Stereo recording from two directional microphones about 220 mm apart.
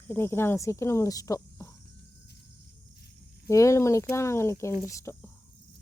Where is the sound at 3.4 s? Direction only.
15° left (ahead or behind).